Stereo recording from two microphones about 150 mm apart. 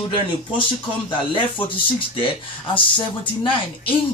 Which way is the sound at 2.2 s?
35° left (ahead or behind).